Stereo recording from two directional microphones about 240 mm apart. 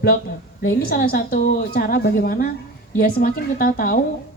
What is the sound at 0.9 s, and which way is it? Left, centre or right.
A woman's voice, left.